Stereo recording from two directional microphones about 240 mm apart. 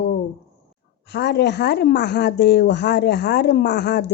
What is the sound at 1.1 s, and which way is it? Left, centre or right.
A woman's voice, left.